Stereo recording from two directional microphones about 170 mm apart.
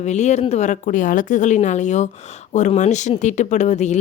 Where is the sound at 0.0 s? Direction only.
40° left (ahead or behind).